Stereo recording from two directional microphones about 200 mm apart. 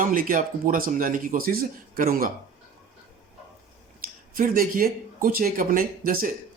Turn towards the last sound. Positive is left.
turn(degrees=-45)  # may be behind; listen again after turning